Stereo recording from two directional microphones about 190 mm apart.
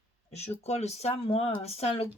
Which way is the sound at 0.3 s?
35° left (ahead or behind).